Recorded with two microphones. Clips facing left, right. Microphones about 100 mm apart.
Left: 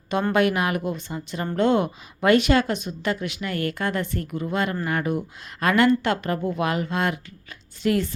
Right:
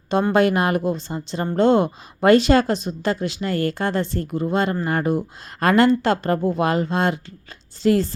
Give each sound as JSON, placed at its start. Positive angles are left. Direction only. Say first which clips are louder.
{"t": 0.3, "sound": "speech", "louder": "right 3 dB", "side_deg": -35}